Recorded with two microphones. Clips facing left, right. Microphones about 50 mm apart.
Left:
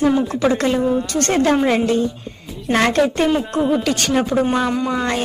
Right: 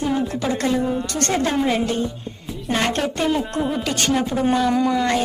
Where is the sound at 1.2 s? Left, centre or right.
Left.